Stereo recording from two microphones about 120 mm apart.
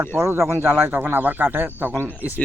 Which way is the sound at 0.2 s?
20° right (ahead or behind).